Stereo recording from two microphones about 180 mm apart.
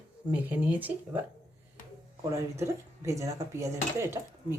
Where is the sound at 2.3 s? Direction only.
15° right (ahead or behind).